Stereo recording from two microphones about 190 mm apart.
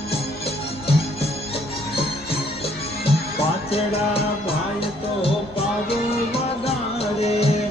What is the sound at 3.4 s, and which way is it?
Music, 30° left (ahead or behind).